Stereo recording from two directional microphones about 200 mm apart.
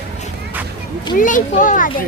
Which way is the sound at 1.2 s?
40° left (ahead or behind).